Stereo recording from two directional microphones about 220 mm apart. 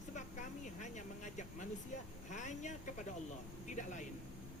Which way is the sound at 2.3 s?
30° left (ahead or behind).